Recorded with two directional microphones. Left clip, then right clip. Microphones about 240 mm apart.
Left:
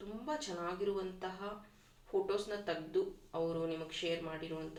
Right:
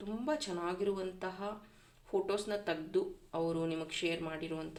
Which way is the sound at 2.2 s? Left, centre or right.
Right.